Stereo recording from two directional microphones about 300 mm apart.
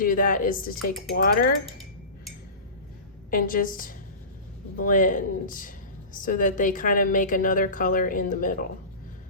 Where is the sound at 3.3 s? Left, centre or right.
Left.